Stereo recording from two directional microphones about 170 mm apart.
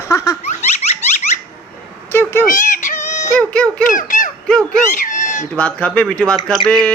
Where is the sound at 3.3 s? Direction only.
5° left (ahead or behind).